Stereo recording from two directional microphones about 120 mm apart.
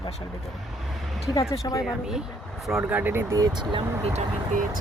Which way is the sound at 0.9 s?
Centre (ahead or behind).